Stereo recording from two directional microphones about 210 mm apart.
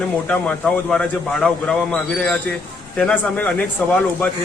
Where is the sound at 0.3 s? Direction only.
5° left (ahead or behind).